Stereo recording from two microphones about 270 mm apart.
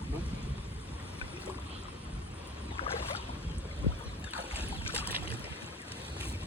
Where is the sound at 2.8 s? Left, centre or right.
Left.